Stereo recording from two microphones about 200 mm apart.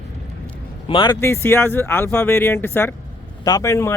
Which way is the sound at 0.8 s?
25° left (ahead or behind).